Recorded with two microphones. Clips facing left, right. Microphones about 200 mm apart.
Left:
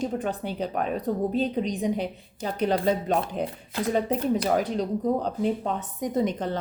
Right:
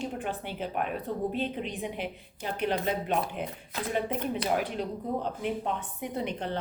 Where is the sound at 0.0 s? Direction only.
40° left (ahead or behind).